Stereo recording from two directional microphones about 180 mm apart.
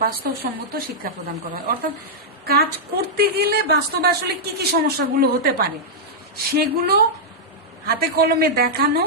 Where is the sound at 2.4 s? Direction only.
60° right (ahead or behind).